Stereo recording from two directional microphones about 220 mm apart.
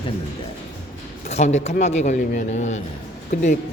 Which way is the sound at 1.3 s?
30° left (ahead or behind).